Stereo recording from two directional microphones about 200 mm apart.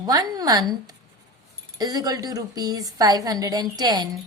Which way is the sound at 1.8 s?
20° right (ahead or behind).